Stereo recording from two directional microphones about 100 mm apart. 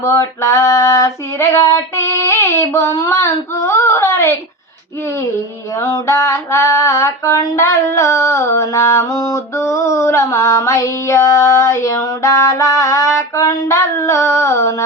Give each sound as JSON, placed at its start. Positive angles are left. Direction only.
{"t": 0.0, "sound": "female singing", "side_deg": 30}
{"t": 2.7, "sound": "speech", "side_deg": 30}
{"t": 5.8, "sound": "a sound", "side_deg": 30}
{"t": 14.3, "sound": "female singing", "side_deg": 30}